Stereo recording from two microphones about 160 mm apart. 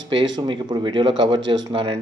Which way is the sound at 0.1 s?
30° right (ahead or behind).